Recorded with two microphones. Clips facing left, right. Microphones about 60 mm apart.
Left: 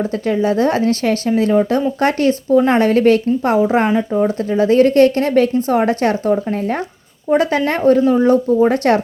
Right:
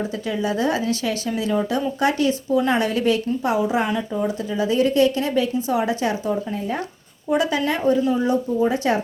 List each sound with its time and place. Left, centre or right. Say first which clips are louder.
0.1 s a woman's voice: left 7 dB; left